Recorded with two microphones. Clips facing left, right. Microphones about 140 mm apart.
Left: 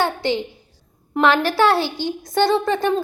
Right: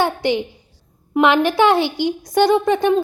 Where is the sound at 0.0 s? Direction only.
15° right (ahead or behind).